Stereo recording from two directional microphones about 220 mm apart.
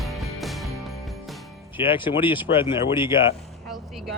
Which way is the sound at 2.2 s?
10° right (ahead or behind).